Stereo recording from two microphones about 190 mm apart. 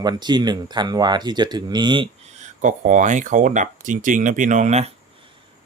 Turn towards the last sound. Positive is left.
turn(degrees=-35)  # may be behind; listen again after turning